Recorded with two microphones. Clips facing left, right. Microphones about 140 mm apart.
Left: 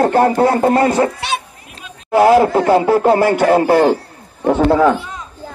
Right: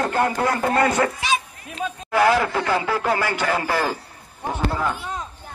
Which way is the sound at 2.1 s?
30° left (ahead or behind).